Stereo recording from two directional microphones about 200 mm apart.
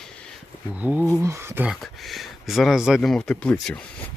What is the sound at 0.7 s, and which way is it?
Speech, 10° right (ahead or behind).